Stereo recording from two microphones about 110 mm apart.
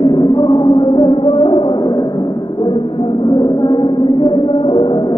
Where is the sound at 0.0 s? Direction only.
45° left (ahead or behind).